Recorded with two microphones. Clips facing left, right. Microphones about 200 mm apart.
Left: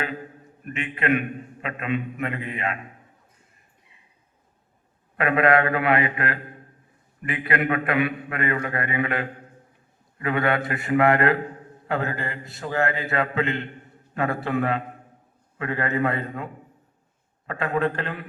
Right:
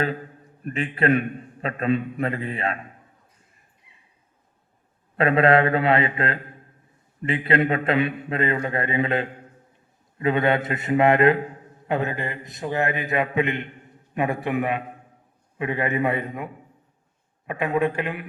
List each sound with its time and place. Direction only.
0.6 s a man's voice: 35° right (ahead or behind)
5.1 s a man's voice: 30° right (ahead or behind); by 18.3 s 15° right (ahead or behind)